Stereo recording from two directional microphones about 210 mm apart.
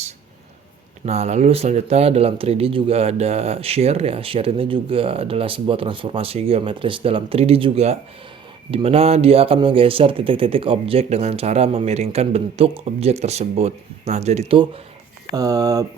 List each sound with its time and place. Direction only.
1.0 s speech: 30° right (ahead or behind)